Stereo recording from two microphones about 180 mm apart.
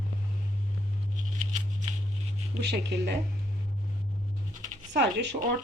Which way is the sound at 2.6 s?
70° right (ahead or behind).